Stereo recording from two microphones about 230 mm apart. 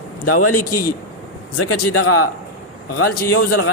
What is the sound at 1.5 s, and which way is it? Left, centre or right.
Speech, left.